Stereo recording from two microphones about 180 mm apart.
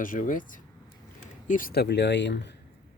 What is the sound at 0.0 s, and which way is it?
Speech, 50° left (ahead or behind).